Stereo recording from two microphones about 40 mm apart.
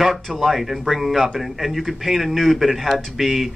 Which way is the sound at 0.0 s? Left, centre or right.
Centre.